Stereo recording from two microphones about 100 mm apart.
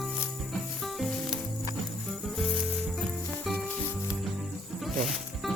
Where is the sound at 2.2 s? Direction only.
Centre (ahead or behind).